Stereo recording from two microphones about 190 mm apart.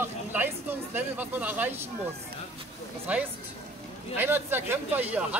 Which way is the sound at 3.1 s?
5° right (ahead or behind).